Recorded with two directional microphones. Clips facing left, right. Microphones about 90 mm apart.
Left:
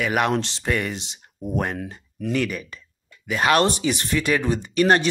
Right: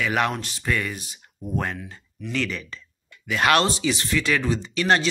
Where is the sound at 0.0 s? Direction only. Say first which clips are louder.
Left 2 dB; 25° left (ahead or behind).